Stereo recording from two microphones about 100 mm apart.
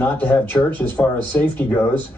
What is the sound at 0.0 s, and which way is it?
A man's voice, 20° left (ahead or behind).